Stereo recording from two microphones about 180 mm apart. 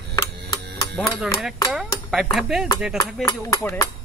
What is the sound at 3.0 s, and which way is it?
Speech, 15° left (ahead or behind).